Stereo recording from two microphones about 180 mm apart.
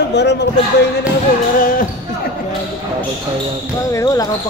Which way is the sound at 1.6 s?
50° left (ahead or behind).